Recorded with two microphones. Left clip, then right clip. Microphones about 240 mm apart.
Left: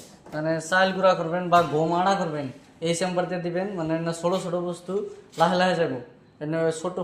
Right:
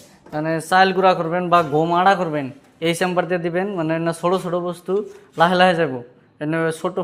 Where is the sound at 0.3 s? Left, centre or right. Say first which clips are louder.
Right 6 dB; right.